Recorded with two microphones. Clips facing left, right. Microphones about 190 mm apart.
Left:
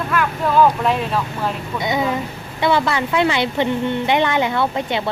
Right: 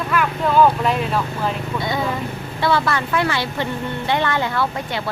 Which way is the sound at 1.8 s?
20° left (ahead or behind).